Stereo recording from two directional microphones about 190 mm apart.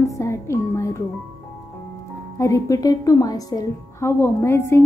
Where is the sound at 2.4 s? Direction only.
15° left (ahead or behind).